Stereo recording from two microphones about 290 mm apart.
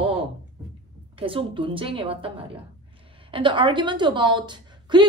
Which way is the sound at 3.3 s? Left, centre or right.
Centre.